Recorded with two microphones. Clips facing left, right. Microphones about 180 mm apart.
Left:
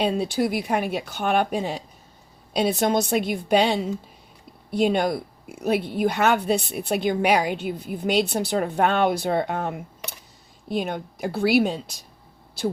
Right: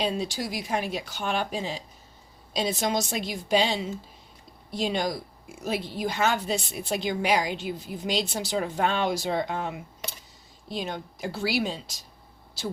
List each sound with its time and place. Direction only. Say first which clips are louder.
0.0 s a woman's voice: left 6 dB; 55° left (ahead or behind)